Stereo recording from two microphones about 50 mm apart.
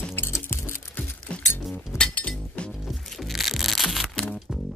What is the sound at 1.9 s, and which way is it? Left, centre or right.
Chink, left.